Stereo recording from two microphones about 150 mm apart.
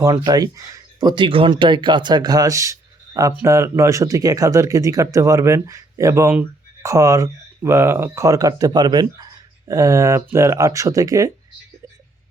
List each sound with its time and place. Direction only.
0.0 s speech: 25° right (ahead or behind)